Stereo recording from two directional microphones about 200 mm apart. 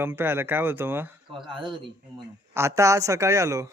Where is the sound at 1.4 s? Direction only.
25° right (ahead or behind).